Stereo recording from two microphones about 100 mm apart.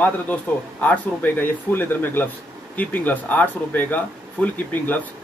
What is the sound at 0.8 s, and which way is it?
Speech, 20° left (ahead or behind).